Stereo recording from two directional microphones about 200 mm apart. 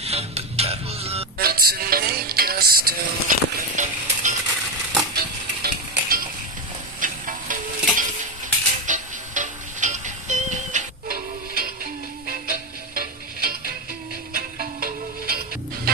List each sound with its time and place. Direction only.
0.0 s music: 30° right (ahead or behind)
1.4 s music: 50° right (ahead or behind)
5.1 s music: 50° right (ahead or behind)